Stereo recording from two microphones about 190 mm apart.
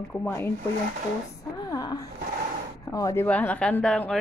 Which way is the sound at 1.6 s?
20° left (ahead or behind).